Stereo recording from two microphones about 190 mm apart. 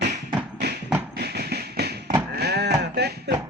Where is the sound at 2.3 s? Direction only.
60° right (ahead or behind).